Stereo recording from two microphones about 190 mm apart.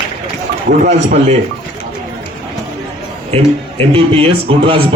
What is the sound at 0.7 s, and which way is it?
Speech, 40° right (ahead or behind).